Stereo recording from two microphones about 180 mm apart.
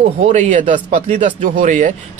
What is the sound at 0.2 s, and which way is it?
Speech, 40° right (ahead or behind).